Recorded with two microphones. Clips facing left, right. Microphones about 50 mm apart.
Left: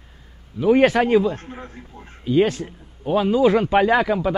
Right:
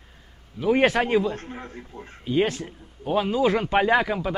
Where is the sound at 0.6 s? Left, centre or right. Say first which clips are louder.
Left 5 dB; centre.